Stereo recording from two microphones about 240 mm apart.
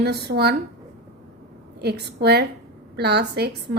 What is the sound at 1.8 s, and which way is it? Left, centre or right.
A woman's voice, right.